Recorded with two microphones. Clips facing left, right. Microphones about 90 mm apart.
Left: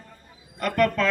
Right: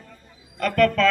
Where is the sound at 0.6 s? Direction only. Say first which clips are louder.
Right 3 dB; 15° left (ahead or behind).